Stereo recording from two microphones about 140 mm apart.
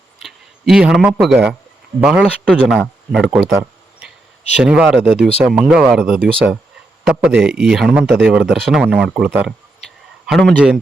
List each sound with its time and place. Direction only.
0.2 s speech: centre (ahead or behind)
2.4 s speech: 5° left (ahead or behind)
4.6 s speech: 5° right (ahead or behind)
5.7 s speech: centre (ahead or behind)